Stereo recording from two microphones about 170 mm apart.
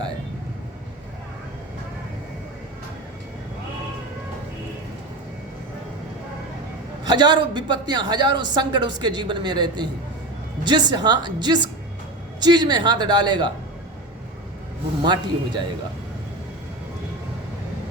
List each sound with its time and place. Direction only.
7.0 s speech: 25° right (ahead or behind)
15.0 s speech: 25° right (ahead or behind)